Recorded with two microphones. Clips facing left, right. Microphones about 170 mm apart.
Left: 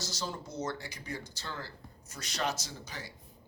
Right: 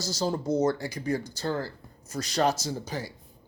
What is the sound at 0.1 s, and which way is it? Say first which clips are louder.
Speech: right 12 dB; 35° right (ahead or behind).